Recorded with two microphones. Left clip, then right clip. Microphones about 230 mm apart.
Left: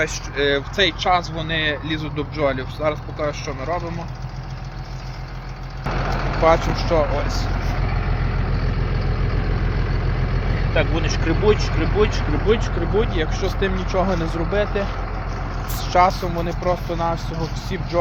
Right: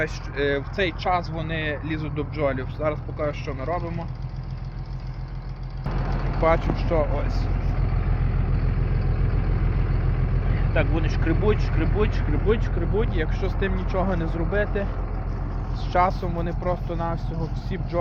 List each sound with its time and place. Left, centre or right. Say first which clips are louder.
0.0 s speech: left 5 dB; centre
5.8 s vehicle: left 8 dB; left
6.7 s speech: left 5 dB; centre
10.8 s speech: left 4 dB; centre